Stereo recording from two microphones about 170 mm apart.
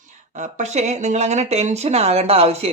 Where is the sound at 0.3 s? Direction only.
45° right (ahead or behind).